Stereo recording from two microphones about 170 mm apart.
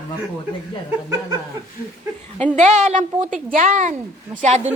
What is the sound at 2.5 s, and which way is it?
A woman's voice, 45° right (ahead or behind).